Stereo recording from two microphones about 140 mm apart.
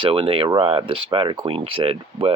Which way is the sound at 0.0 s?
40° right (ahead or behind).